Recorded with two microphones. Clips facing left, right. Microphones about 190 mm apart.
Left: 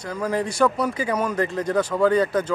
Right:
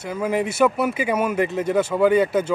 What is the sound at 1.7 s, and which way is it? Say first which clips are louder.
Speech: right 2 dB; 25° right (ahead or behind).